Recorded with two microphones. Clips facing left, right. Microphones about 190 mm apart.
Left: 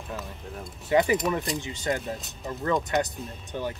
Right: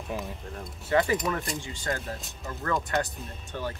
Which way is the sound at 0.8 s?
15° left (ahead or behind).